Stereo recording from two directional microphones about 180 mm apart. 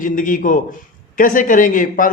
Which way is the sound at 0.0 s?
50° left (ahead or behind).